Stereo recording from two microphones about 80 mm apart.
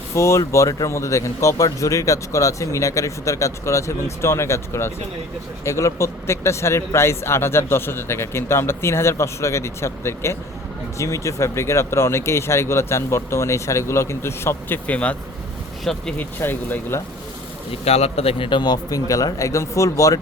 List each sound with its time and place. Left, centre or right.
0.1 s speech: left
14.8 s speech: centre
15.8 s speech: centre
16.1 s speech: left
18.3 s speech: left